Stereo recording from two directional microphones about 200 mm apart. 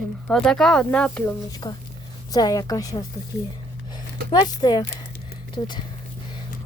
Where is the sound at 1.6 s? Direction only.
20° left (ahead or behind).